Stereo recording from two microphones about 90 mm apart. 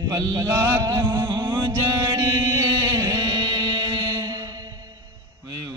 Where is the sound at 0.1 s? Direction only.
45° right (ahead or behind).